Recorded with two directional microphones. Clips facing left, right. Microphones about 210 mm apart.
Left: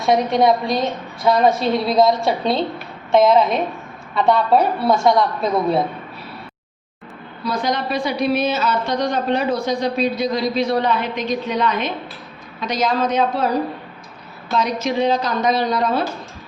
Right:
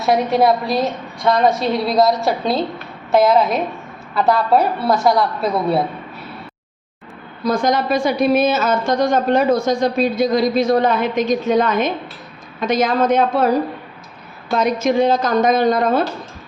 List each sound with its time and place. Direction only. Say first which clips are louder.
0.0 s a woman's voice: right 1 dB; 5° right (ahead or behind)
7.4 s a woman's voice: right 5 dB; 45° right (ahead or behind)
14.5 s a woman's voice: right 4 dB; 50° right (ahead or behind)